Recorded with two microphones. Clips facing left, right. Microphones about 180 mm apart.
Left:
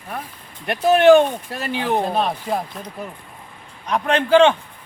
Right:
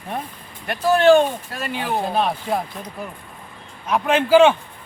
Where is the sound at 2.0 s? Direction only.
Centre (ahead or behind).